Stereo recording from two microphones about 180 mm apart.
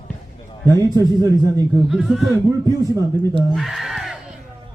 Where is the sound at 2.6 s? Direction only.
20° right (ahead or behind).